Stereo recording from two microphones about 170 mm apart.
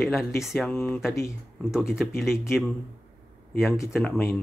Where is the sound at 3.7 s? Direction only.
15° left (ahead or behind).